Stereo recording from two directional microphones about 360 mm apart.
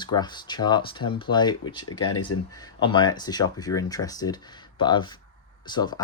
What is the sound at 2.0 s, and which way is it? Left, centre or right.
Speech, left.